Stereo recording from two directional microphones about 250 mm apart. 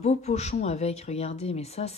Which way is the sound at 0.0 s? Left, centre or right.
Left.